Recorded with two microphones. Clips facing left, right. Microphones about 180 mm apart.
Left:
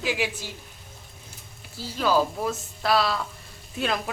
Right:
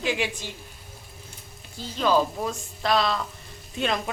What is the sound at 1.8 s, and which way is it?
A woman's voice, 5° left (ahead or behind).